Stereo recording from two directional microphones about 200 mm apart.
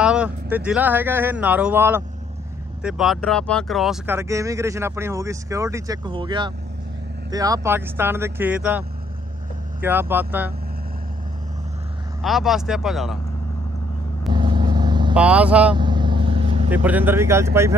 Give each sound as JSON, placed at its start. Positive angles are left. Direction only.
{"t": 0.0, "sound": "speech", "side_deg": -5}
{"t": 12.2, "sound": "speech", "side_deg": 0}
{"t": 14.3, "sound": "vehicle", "side_deg": -20}
{"t": 15.1, "sound": "speech", "side_deg": -5}
{"t": 15.7, "sound": "vehicle", "side_deg": -20}
{"t": 16.7, "sound": "speech", "side_deg": -10}